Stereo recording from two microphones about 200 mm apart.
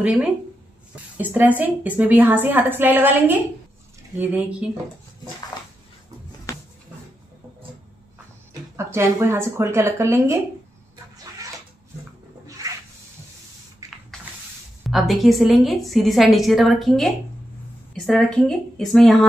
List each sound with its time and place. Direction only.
0.0 s a woman's voice: 5° right (ahead or behind)
6.5 s a sound: 15° left (ahead or behind)
8.7 s a woman's voice: 15° right (ahead or behind)
12.6 s a sound: 15° right (ahead or behind)
13.8 s spray: 15° right (ahead or behind)
14.8 s a woman's voice: centre (ahead or behind)